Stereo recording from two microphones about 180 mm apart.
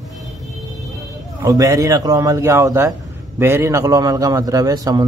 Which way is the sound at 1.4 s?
20° right (ahead or behind).